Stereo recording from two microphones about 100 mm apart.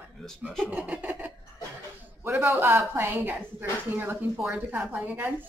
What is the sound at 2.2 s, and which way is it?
A woman's voice, 25° right (ahead or behind).